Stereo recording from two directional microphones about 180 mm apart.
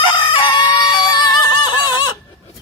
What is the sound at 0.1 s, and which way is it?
Music, 25° left (ahead or behind).